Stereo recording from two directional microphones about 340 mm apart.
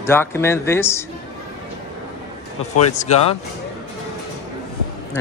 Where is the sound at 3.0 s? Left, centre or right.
Centre.